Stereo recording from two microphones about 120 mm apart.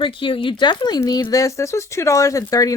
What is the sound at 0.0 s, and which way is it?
Speech, 45° left (ahead or behind).